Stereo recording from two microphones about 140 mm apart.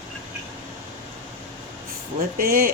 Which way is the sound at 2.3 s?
90° right.